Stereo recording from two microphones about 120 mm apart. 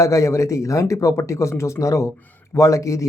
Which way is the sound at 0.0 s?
25° left (ahead or behind).